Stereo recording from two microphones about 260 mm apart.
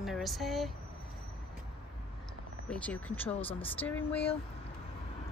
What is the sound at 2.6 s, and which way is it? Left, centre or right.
Speech, centre.